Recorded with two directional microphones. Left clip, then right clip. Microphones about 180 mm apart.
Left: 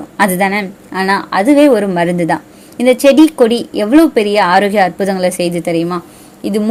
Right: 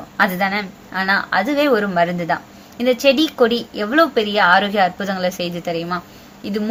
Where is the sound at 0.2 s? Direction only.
40° left (ahead or behind).